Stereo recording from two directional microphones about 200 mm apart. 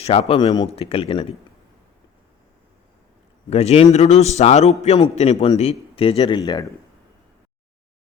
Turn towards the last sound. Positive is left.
turn(degrees=20)  # may be behind; listen again after turning